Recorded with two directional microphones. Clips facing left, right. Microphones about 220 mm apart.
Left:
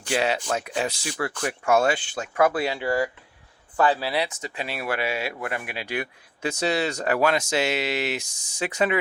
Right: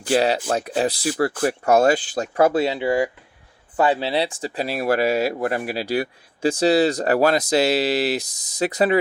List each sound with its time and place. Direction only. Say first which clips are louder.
0.0 s speech: right 6 dB; 35° right (ahead or behind)